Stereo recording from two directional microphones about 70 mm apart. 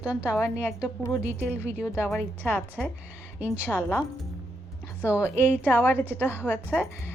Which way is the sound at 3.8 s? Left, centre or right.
Left.